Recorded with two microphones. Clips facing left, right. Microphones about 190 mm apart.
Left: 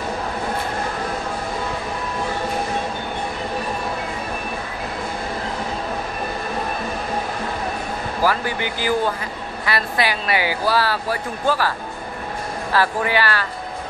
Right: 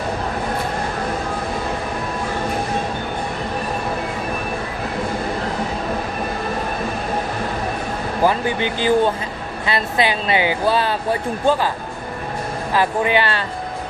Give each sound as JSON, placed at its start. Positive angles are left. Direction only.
{"t": 8.2, "sound": "speech", "side_deg": -20}
{"t": 12.7, "sound": "speech", "side_deg": -20}